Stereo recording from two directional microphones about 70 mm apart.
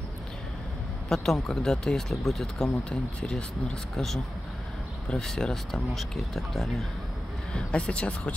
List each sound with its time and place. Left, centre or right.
1.0 s speech: centre
7.5 s speech: centre